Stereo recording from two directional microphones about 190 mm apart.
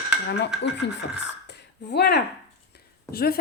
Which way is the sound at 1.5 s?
65° left (ahead or behind).